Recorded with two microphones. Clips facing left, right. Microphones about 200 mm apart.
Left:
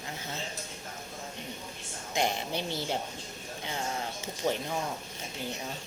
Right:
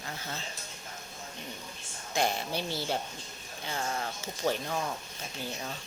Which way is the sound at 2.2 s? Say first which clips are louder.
Even; 20° left (ahead or behind).